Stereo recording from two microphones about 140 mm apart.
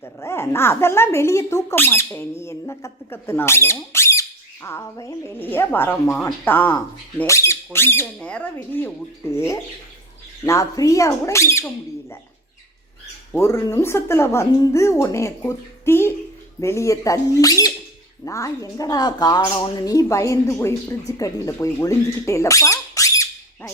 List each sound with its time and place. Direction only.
0.0 s speech: 20° left (ahead or behind)
13.3 s speech: 20° left (ahead or behind)